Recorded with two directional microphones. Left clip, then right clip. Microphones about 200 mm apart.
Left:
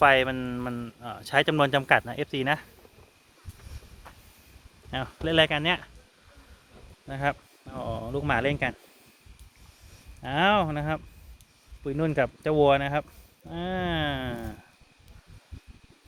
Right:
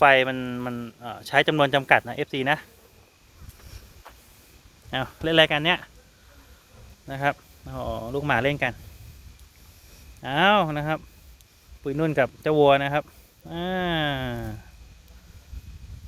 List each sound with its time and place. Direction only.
0.0 s speech: 10° right (ahead or behind)
4.9 s speech: 25° right (ahead or behind)
7.1 s speech: 15° right (ahead or behind)
10.2 s speech: 15° right (ahead or behind)